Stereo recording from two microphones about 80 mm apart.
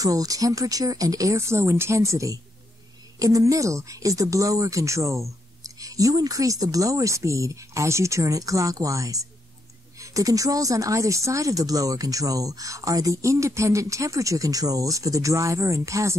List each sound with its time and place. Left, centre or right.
0.0 s speech: right